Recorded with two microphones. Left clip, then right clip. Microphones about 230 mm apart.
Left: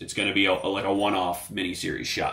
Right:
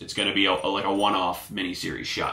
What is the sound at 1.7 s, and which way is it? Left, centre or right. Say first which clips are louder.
Speech: left 1 dB; right.